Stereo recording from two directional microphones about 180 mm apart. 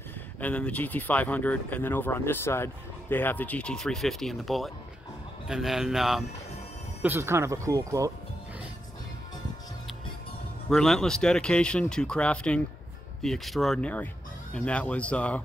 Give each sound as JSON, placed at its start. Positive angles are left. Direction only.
{"t": 0.4, "sound": "speech", "side_deg": 10}
{"t": 7.0, "sound": "speech", "side_deg": -10}
{"t": 10.7, "sound": "speech", "side_deg": 0}